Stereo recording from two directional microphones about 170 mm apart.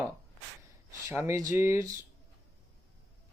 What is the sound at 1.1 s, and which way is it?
Speech, 15° right (ahead or behind).